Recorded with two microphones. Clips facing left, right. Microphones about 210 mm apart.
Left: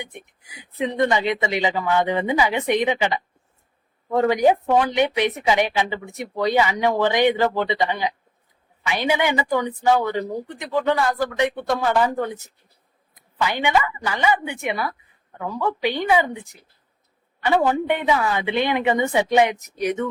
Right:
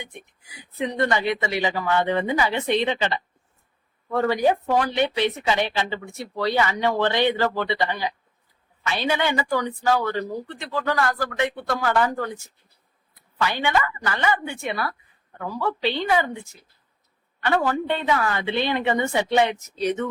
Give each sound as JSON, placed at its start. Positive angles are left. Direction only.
{"t": 0.0, "sound": "speech", "side_deg": 15}